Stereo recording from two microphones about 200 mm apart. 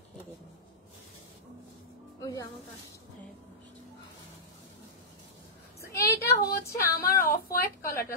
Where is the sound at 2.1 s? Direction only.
15° left (ahead or behind).